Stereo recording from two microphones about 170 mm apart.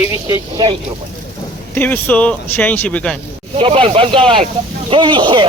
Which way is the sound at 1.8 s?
10° left (ahead or behind).